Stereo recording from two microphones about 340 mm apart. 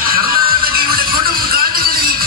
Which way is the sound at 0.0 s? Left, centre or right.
Right.